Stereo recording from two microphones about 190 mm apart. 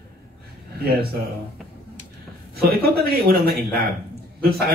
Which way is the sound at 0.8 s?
55° right (ahead or behind).